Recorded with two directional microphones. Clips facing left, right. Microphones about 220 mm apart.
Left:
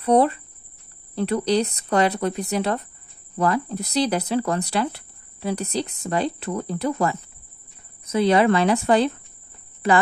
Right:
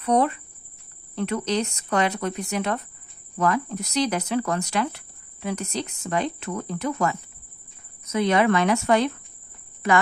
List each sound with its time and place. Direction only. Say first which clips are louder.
0.0 s speech: left 4 dB; 30° left (ahead or behind)